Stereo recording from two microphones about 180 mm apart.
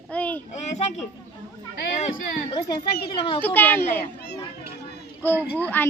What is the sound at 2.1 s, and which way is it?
Speech, 45° left (ahead or behind).